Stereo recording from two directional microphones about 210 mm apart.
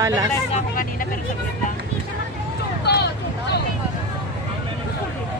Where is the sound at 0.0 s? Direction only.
15° right (ahead or behind).